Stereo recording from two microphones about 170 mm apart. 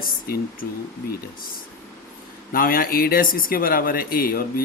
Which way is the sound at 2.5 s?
60° left (ahead or behind).